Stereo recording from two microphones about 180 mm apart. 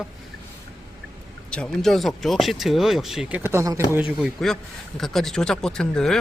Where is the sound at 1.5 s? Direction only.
5° left (ahead or behind); by 3.8 s 15° right (ahead or behind).